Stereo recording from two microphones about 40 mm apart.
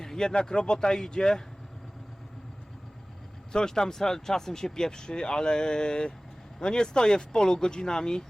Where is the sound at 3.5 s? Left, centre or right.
Centre.